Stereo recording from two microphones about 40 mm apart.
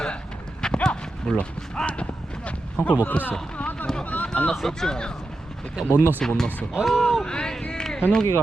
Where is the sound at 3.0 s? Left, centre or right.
Left.